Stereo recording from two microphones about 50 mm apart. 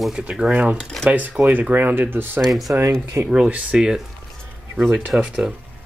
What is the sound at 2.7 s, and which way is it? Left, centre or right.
Speech, right.